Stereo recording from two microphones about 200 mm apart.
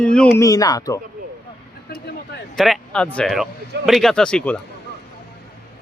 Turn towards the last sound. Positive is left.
turn(degrees=5)  # may be behind; listen again after turning